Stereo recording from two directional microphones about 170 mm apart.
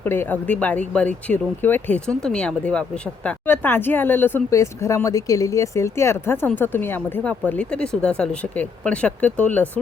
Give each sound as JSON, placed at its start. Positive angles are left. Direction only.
{"t": 0.0, "sound": "speech", "side_deg": 10}